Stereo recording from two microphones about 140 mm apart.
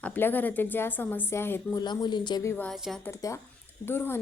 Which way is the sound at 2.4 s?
20° left (ahead or behind).